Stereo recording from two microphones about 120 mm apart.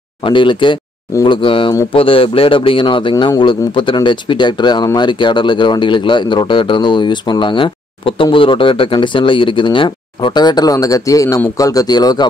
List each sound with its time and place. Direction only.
0.2 s a man's voice: 45° left (ahead or behind)